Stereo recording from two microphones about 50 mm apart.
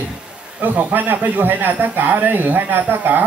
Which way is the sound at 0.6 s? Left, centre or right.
Right.